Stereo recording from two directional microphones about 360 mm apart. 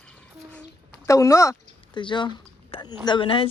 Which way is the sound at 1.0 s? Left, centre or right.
Centre.